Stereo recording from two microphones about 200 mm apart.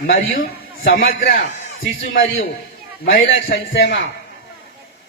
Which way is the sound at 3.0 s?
50° left (ahead or behind).